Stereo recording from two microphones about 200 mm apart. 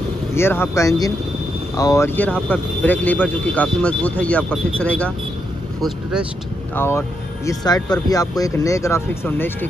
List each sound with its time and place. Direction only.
0.3 s speech: 10° left (ahead or behind)
6.7 s speech: 10° left (ahead or behind)